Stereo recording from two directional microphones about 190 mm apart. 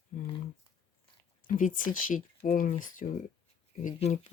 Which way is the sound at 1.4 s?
45° left (ahead or behind).